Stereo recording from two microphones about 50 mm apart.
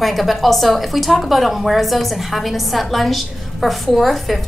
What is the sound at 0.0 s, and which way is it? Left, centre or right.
A woman's voice, centre.